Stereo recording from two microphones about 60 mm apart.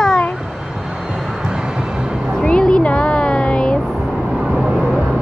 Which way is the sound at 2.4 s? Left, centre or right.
Centre.